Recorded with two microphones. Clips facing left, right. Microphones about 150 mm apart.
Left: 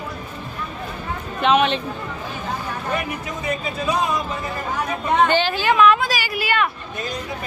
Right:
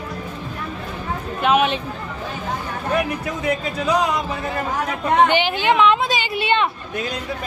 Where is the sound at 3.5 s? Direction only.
75° right (ahead or behind).